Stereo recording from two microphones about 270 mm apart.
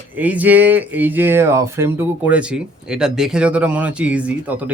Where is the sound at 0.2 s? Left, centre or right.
Centre.